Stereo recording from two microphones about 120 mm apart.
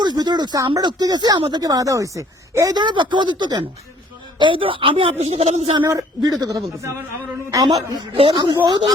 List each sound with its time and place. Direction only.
0.0 s speech: 35° right (ahead or behind)
1.6 s a woman's voice: 30° right (ahead or behind); by 5.1 s 45° right (ahead or behind)
5.2 s speech: 60° right (ahead or behind)
5.9 s a woman's voice: 30° right (ahead or behind)
8.1 s a woman's voice: 50° right (ahead or behind)